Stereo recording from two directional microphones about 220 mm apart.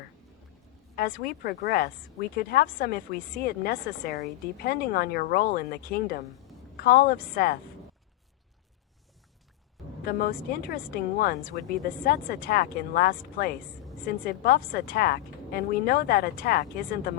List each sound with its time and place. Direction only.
0.9 s a woman's voice: 40° left (ahead or behind)
10.1 s a woman's voice: 45° left (ahead or behind)